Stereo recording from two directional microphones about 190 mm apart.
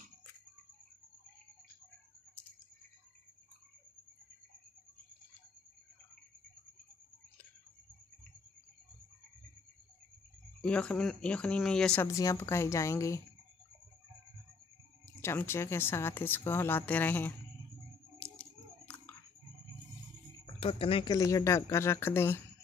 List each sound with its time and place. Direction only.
10.6 s speech: 5° left (ahead or behind)
15.2 s speech: 10° left (ahead or behind)
18.2 s a sound: 10° left (ahead or behind)
20.5 s speech: 30° left (ahead or behind); by 22.4 s 10° left (ahead or behind)